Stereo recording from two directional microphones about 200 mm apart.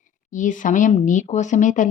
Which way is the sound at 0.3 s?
40° left (ahead or behind).